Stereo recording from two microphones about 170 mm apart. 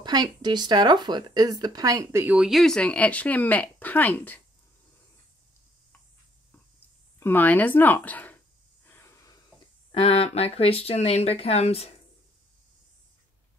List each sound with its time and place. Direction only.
0.0 s speech: 25° right (ahead or behind)
2.2 s speech: 5° right (ahead or behind); by 4.4 s 10° left (ahead or behind)
7.2 s speech: 10° left (ahead or behind)
8.8 s a sound: 15° left (ahead or behind)
9.9 s speech: 35° left (ahead or behind)